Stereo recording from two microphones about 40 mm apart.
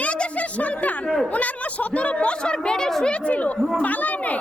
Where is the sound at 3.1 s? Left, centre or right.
Left.